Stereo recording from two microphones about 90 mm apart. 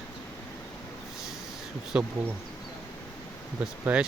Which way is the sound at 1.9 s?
15° right (ahead or behind).